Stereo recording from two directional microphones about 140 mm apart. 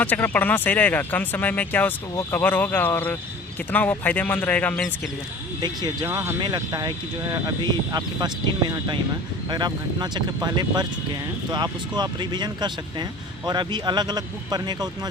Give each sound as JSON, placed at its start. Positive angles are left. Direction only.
{"t": 0.0, "sound": "speech", "side_deg": 15}
{"t": 5.5, "sound": "speech", "side_deg": -30}
{"t": 6.1, "sound": "speech", "side_deg": -20}
{"t": 9.5, "sound": "speech", "side_deg": -30}